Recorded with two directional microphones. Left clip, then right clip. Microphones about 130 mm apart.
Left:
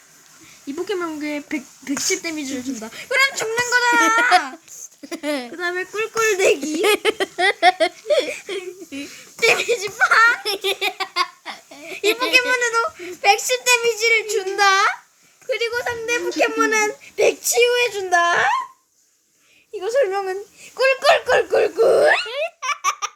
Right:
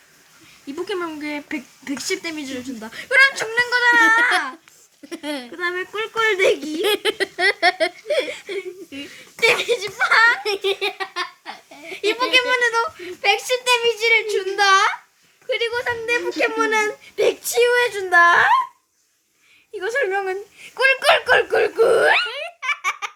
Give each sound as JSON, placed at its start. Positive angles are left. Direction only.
{"t": 0.9, "sound": "speech", "side_deg": 10}
{"t": 5.0, "sound": "speech", "side_deg": 45}
{"t": 5.5, "sound": "speech", "side_deg": 10}
{"t": 6.7, "sound": "speech", "side_deg": 45}
{"t": 9.0, "sound": "speech", "side_deg": 10}
{"t": 10.4, "sound": "baby laughter", "side_deg": 35}
{"t": 11.9, "sound": "speech", "side_deg": 5}
{"t": 19.7, "sound": "speech", "side_deg": -5}
{"t": 22.3, "sound": "baby laughter", "side_deg": 20}